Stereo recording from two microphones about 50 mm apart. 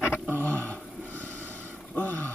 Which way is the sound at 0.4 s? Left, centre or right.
Left.